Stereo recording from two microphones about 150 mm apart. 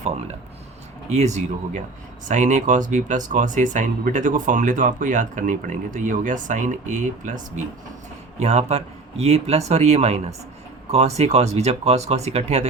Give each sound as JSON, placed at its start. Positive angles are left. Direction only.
{"t": 1.1, "sound": "a man's voice", "side_deg": -50}
{"t": 8.4, "sound": "a man's voice", "side_deg": -45}